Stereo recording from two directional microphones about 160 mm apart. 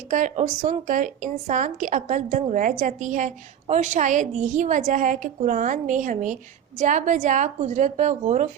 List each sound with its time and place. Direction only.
0.1 s speech: 50° right (ahead or behind)